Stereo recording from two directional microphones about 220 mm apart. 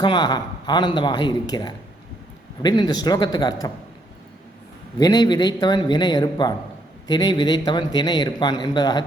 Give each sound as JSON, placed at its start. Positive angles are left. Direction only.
{"t": 0.0, "sound": "speech", "side_deg": 20}
{"t": 4.9, "sound": "speech", "side_deg": 20}